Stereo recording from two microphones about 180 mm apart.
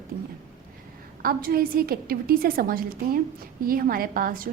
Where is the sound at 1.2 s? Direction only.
55° right (ahead or behind).